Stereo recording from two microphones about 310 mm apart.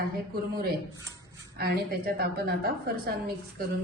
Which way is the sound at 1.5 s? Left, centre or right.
Right.